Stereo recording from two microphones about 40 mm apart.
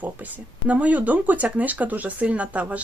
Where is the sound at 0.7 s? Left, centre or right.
Right.